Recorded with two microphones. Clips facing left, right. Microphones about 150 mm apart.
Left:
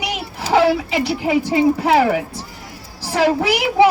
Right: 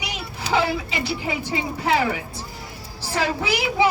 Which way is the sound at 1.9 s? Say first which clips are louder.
Left 7 dB; 75° left (ahead or behind).